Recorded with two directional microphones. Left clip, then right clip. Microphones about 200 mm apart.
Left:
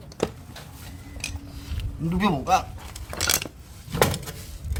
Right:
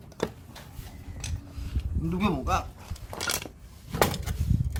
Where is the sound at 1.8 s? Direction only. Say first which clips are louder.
Left 4 dB; 30° left (ahead or behind).